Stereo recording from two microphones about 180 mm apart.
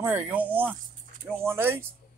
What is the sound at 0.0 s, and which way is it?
Speech, 10° right (ahead or behind).